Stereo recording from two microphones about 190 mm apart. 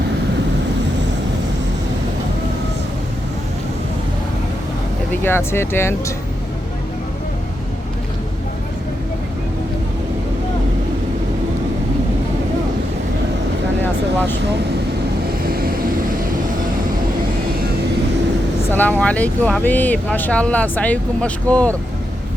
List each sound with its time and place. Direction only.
5.2 s speech: 10° left (ahead or behind)
15.4 s vehicle: 50° right (ahead or behind)
18.7 s speech: 10° left (ahead or behind)